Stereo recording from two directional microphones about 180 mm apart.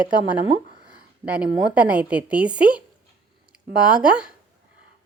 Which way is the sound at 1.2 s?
5° right (ahead or behind).